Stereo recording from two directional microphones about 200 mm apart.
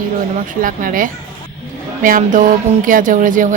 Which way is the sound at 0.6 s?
45° right (ahead or behind).